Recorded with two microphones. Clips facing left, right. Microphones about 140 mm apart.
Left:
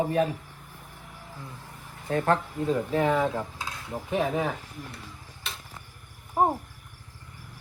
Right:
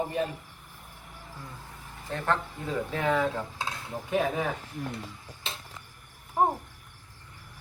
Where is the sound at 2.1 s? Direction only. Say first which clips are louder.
Left 5 dB; 50° left (ahead or behind).